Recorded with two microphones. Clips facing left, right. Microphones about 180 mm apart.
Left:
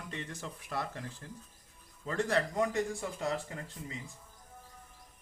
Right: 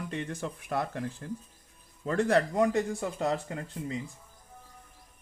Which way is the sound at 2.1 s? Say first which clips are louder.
Right 6 dB; 55° right (ahead or behind).